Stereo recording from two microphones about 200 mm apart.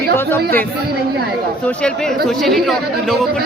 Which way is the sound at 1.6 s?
5° left (ahead or behind).